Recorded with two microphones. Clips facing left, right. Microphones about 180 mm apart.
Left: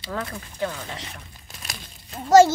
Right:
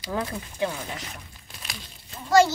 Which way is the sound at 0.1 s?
15° right (ahead or behind).